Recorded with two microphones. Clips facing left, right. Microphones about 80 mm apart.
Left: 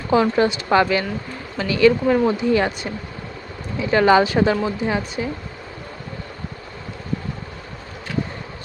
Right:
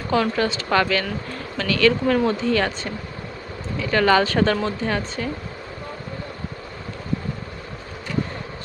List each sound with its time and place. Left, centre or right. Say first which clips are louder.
0.1 s speech: left 4 dB; centre